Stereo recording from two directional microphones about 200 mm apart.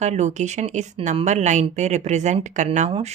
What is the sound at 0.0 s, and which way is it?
Speech, 35° right (ahead or behind).